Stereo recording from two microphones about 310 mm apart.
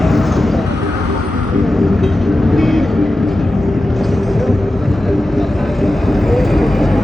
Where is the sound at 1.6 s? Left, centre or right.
Centre.